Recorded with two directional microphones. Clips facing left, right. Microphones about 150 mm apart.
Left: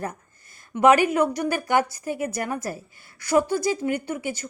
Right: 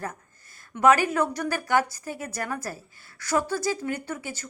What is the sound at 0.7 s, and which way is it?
Speech, 20° left (ahead or behind).